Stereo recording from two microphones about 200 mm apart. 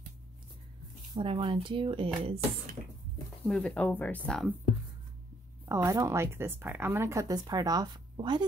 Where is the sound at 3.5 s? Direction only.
5° left (ahead or behind).